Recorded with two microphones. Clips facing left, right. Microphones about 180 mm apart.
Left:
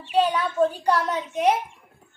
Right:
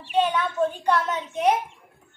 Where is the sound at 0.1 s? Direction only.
35° left (ahead or behind).